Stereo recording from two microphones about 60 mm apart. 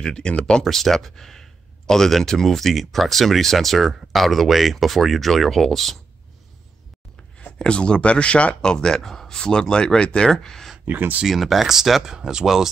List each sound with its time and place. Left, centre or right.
0.0 s speech: centre
7.3 s speech: centre
10.9 s speech: right
11.2 s speech: centre